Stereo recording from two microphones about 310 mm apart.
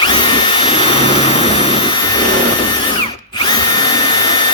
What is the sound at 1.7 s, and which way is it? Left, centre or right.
Vacuum cleaner, centre.